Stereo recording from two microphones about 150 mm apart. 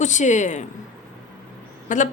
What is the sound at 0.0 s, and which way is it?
Speech, 55° left (ahead or behind).